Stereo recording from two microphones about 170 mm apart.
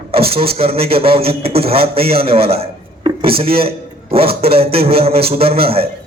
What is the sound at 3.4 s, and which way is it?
A man's voice, 35° right (ahead or behind).